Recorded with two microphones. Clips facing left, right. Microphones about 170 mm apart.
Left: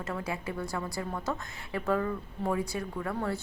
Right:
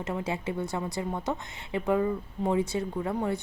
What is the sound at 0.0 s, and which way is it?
A woman's voice, 20° right (ahead or behind).